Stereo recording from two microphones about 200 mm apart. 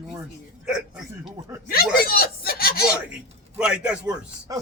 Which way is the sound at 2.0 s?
50° left (ahead or behind).